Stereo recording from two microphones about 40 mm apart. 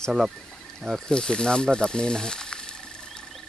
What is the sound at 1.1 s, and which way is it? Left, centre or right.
Speech, left.